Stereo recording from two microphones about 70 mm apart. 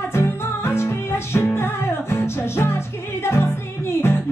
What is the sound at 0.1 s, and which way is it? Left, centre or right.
Music, left.